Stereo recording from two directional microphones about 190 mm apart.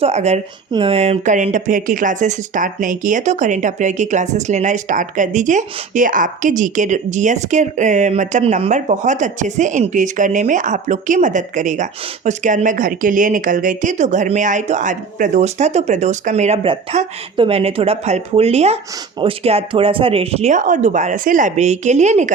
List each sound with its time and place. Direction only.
0.0 s speech: 35° right (ahead or behind)